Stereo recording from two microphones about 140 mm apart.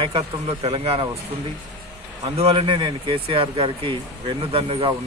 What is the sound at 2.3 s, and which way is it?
Speech, 40° right (ahead or behind).